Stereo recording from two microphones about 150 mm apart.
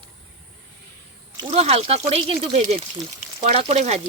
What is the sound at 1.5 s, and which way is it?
Speech, 40° right (ahead or behind).